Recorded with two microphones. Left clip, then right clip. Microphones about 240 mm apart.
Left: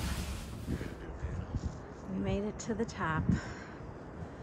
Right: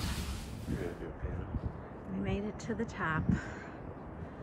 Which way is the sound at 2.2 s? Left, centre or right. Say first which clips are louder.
Left 2 dB; centre.